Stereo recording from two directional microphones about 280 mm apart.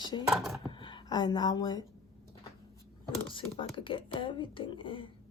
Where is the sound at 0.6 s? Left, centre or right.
Centre.